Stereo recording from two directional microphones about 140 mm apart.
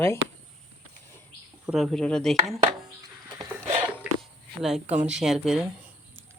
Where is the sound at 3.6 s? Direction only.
45° right (ahead or behind).